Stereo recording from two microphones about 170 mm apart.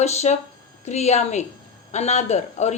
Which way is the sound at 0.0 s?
40° left (ahead or behind).